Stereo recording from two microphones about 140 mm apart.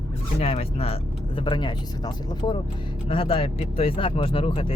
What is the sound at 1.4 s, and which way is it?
Speech, 35° left (ahead or behind).